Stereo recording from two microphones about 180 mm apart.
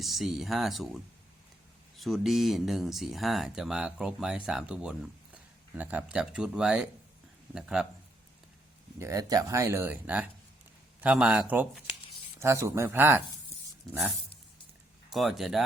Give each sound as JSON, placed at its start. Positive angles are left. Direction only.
{"t": 0.0, "sound": "speech", "side_deg": 0}
{"t": 9.0, "sound": "speech", "side_deg": -15}
{"t": 15.1, "sound": "speech", "side_deg": 0}